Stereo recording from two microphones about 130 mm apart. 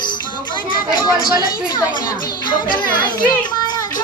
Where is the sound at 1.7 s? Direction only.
30° left (ahead or behind).